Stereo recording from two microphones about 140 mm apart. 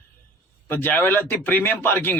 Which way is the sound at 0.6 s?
15° left (ahead or behind).